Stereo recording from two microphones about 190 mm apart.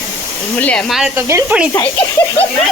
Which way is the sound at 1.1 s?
15° right (ahead or behind).